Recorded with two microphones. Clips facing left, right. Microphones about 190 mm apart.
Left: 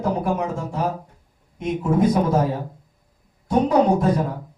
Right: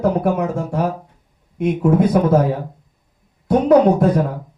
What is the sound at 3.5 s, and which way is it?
Speech, 60° right (ahead or behind).